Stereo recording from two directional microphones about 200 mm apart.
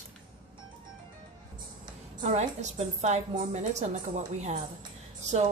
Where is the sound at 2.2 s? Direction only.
35° right (ahead or behind).